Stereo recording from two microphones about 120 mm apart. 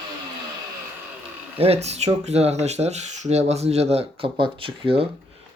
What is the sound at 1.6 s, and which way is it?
Speech, 60° right (ahead or behind).